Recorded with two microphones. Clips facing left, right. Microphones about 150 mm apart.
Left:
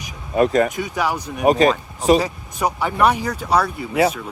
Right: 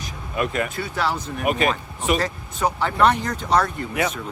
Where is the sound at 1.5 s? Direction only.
35° left (ahead or behind).